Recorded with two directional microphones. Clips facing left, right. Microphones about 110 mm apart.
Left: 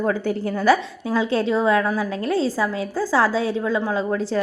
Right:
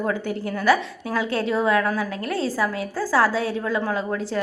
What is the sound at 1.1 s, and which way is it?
A woman's voice, 25° left (ahead or behind).